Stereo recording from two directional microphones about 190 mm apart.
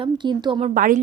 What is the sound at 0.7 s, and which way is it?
Speech, 45° right (ahead or behind).